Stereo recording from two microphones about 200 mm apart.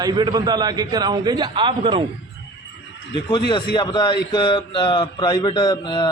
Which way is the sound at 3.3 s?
25° left (ahead or behind).